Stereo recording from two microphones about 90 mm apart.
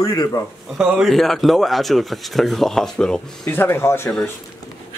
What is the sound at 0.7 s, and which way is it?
Speech, 10° right (ahead or behind).